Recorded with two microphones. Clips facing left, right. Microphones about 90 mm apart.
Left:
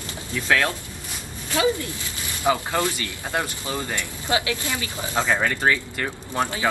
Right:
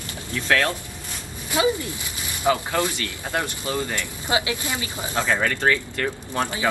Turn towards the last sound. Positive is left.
turn(degrees=15)  # may be behind; listen again after turning